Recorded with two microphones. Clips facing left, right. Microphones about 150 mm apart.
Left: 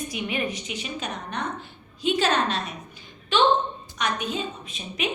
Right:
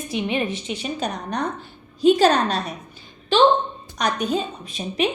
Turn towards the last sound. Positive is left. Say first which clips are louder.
# right 8 dB
turn(degrees=-40)  # may be behind; listen again after turning